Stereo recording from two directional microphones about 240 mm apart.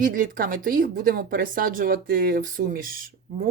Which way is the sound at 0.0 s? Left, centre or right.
Right.